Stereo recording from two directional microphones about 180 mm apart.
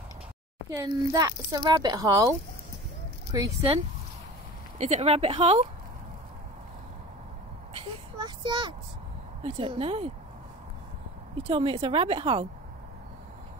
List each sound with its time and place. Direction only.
0.7 s a child's voice: 20° right (ahead or behind)
3.3 s speech: 20° right (ahead or behind)
4.7 s speech: 40° right (ahead or behind)
8.2 s a child's voice: 25° right (ahead or behind)
11.4 s speech: 35° right (ahead or behind)